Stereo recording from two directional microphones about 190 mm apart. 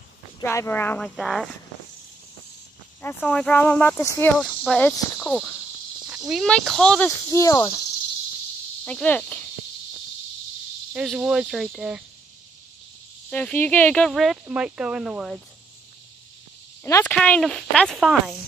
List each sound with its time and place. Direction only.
0.4 s speech: 15° left (ahead or behind)
3.2 s speech: 5° left (ahead or behind)
7.2 s speech: 15° left (ahead or behind)
8.8 s speech: 5° left (ahead or behind)
10.9 s speech: 5° right (ahead or behind)
13.3 s speech: 10° left (ahead or behind)
16.8 s speech: 10° left (ahead or behind)